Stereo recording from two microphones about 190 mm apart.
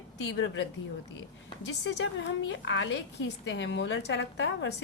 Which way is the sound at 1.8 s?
65° left (ahead or behind).